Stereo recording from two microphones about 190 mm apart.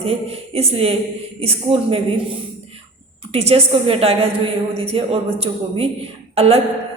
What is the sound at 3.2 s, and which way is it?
A man's voice, 35° right (ahead or behind).